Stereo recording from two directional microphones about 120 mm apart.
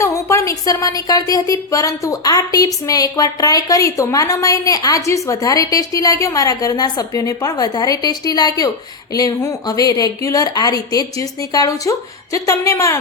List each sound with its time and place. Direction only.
0.0 s a woman's voice: 25° left (ahead or behind)